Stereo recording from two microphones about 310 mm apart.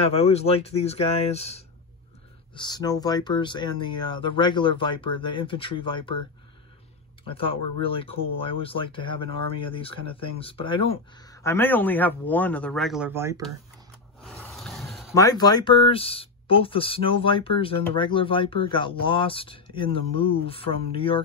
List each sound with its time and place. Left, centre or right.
0.0 s speech: centre
7.2 s speech: centre
14.2 s a sound: centre
15.1 s speech: centre